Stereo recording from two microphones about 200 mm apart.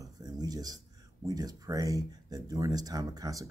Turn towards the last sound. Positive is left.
turn(degrees=-15)  # may be behind; listen again after turning